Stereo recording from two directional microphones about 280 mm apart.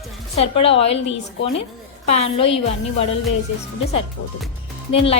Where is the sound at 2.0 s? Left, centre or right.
Left.